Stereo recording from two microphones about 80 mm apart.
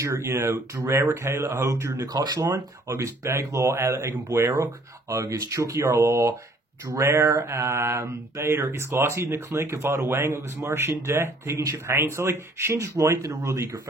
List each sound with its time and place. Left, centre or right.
0.0 s mantra: right